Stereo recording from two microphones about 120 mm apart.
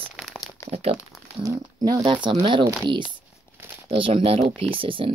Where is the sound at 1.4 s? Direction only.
30° right (ahead or behind).